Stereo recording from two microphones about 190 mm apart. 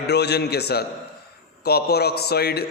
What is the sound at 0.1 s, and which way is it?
A man's voice, 60° left (ahead or behind).